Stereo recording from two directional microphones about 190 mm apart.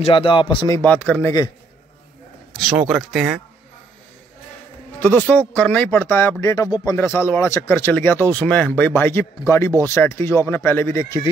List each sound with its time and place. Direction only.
0.0 s speech: 25° left (ahead or behind)
0.7 s speech: 10° left (ahead or behind)
2.5 s speech: centre (ahead or behind)
5.0 s speech: 10° left (ahead or behind)